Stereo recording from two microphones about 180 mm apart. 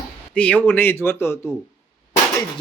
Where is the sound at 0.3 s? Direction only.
5° left (ahead or behind).